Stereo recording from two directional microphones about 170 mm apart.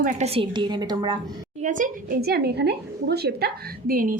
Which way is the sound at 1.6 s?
50° right (ahead or behind).